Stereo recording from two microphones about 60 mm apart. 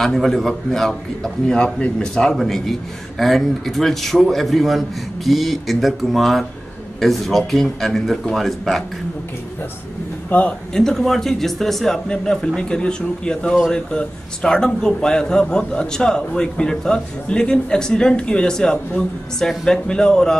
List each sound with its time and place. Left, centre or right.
0.0 s a man's voice: centre
10.3 s a man's voice: left
10.7 s a man's voice: centre